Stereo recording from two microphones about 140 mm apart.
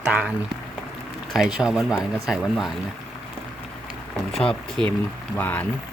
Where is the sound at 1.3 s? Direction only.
5° right (ahead or behind).